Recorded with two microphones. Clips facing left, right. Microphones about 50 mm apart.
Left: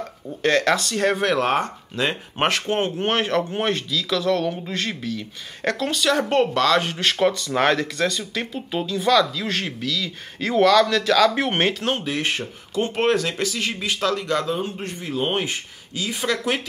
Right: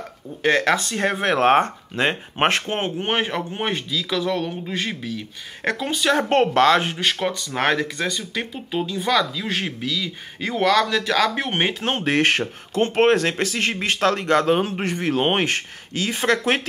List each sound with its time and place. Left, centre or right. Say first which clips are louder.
0.4 s speech: even; right
2.6 s speech: left 2 dB; right
6.1 s speech: right 4 dB; right
6.8 s speech: right 1 dB; centre
7.1 s speech: left 3 dB; centre
12.0 s speech: right 6 dB; right
12.7 s speech: right 3 dB; right
14.5 s a man's voice: right 6 dB; right